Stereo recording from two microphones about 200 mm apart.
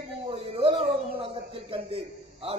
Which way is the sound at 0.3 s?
30° right (ahead or behind).